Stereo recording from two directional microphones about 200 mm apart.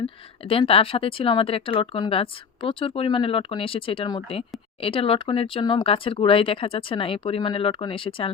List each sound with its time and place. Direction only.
0.4 s speech: 30° left (ahead or behind)